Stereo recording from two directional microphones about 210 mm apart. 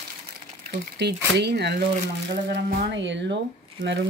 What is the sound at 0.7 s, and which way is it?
Speech, 55° right (ahead or behind).